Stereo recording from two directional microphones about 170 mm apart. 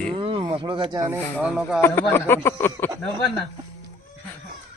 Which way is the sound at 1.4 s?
5° right (ahead or behind).